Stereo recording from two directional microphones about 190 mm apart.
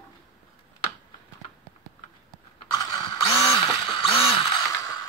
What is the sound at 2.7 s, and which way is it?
Mechanisms, 20° left (ahead or behind).